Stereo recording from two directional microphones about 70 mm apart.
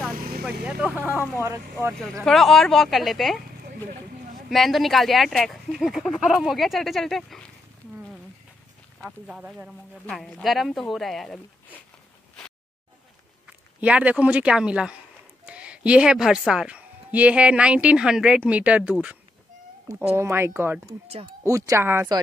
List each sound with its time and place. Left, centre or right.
0.7 s speech: centre
1.4 s speech: right
2.2 s speech: centre
4.5 s speech: centre
10.0 s speech: centre
13.7 s speech: centre
20.0 s speech: right
21.5 s speech: right
21.7 s speech: right